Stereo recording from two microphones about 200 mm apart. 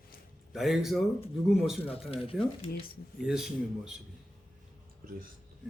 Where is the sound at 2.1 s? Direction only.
25° left (ahead or behind).